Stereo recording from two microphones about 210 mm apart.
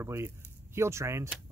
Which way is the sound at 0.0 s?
10° right (ahead or behind).